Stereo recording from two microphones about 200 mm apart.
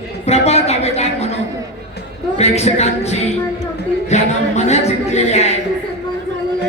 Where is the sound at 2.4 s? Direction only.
35° left (ahead or behind).